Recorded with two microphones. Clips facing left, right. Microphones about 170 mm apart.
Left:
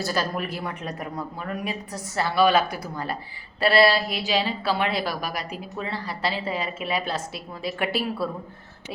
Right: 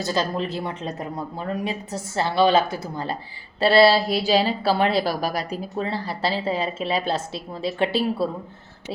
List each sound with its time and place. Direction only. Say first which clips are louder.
0.0 s a woman's voice: right 3 dB; 20° right (ahead or behind)